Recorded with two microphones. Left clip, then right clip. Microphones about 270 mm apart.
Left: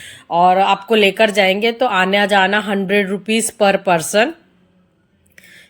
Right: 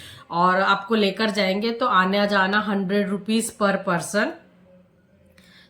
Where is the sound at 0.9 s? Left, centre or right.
Centre.